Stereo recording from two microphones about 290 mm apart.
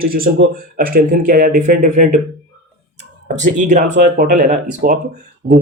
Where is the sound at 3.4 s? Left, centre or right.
Right.